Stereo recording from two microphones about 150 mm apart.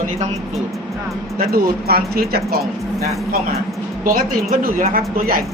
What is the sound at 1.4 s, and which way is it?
Speech, 85° right.